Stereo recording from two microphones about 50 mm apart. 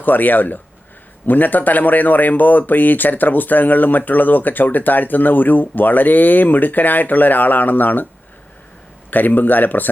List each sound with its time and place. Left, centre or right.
0.0 s speech: left
9.0 s speech: left